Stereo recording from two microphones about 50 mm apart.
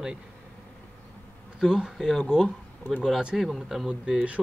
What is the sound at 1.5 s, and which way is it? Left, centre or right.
Speech, centre.